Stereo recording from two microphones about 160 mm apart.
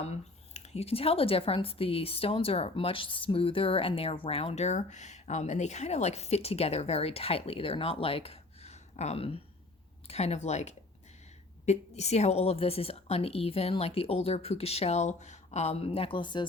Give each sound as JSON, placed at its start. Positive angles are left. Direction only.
{"t": 0.0, "sound": "speech", "side_deg": 45}